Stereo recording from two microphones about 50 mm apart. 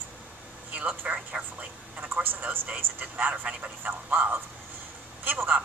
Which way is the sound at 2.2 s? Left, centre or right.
Right.